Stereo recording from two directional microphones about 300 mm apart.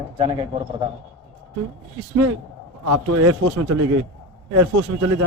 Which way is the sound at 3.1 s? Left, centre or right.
Right.